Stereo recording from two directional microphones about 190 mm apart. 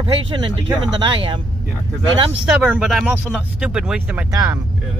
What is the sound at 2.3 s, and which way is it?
Speech, 5° right (ahead or behind).